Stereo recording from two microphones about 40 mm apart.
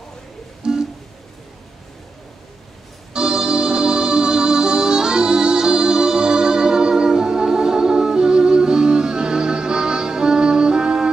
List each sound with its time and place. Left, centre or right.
0.6 s music: centre
3.1 s music: centre